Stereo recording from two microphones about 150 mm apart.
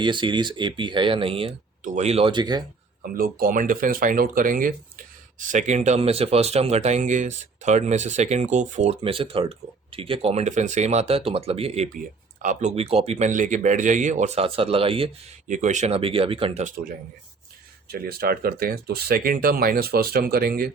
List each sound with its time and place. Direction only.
0.0 s speech: 30° right (ahead or behind)
1.8 s speech: 55° right (ahead or behind); by 2.6 s 30° right (ahead or behind)
3.2 s speech: 75° right (ahead or behind)
5.5 s speech: 55° right (ahead or behind)
12.4 s speech: 55° right (ahead or behind); by 15.1 s 40° right (ahead or behind)
15.4 s speech: 55° right (ahead or behind); by 16.6 s 40° right (ahead or behind)
17.8 s speech: 90° right